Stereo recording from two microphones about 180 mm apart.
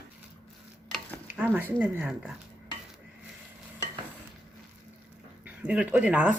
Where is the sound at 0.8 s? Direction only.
5° left (ahead or behind).